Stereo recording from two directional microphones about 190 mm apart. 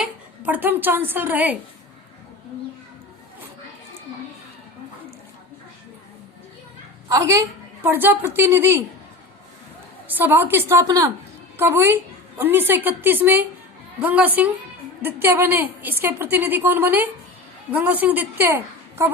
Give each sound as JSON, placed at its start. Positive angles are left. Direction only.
{"t": 0.0, "sound": "a woman's voice", "side_deg": -10}
{"t": 7.1, "sound": "a woman's voice", "side_deg": -15}
{"t": 10.1, "sound": "a woman's voice", "side_deg": -10}